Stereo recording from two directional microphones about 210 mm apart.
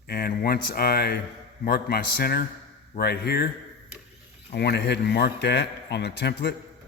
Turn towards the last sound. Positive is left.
turn(degrees=50)  # may be behind; listen again after turning